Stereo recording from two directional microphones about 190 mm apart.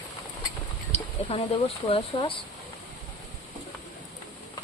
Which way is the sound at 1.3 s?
30° left (ahead or behind).